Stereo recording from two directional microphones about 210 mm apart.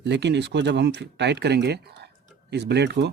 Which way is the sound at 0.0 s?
55° right (ahead or behind).